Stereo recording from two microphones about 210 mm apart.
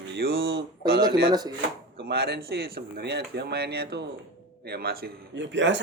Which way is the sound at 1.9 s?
50° right (ahead or behind).